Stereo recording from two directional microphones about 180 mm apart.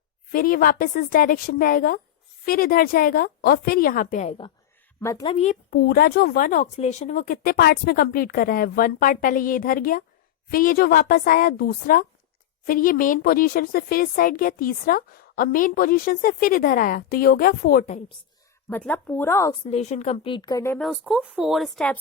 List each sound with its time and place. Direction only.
0.3 s speech: 55° left (ahead or behind); by 4.5 s 35° left (ahead or behind)
4.9 s speech: 15° left (ahead or behind)
5.3 s speech: 40° left (ahead or behind)
5.7 s speech: 55° left (ahead or behind)
18.7 s speech: 10° left (ahead or behind)
19.7 s speech: 40° left (ahead or behind); by 20.7 s 20° left (ahead or behind)
20.7 s speech: centre (ahead or behind)